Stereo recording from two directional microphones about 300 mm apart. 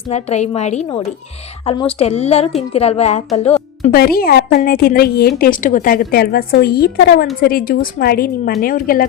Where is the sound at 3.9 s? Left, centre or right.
Left.